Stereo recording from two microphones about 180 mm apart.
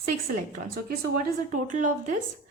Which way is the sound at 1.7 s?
45° right (ahead or behind).